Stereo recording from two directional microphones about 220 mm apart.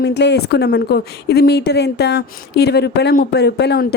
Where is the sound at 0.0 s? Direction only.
50° left (ahead or behind).